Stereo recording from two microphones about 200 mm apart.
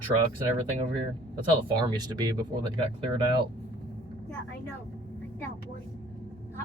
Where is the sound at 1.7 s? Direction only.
20° right (ahead or behind).